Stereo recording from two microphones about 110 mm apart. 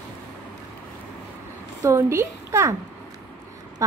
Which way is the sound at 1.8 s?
25° right (ahead or behind).